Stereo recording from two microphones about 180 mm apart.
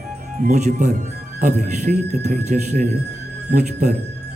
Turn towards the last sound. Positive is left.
turn(degrees=-40)  # may be behind; listen again after turning